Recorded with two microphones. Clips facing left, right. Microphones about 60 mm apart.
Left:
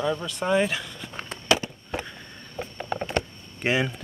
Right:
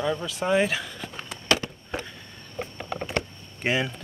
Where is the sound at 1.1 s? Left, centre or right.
Left.